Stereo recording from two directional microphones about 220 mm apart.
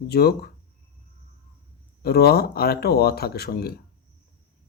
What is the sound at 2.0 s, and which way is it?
Speech, 45° left (ahead or behind).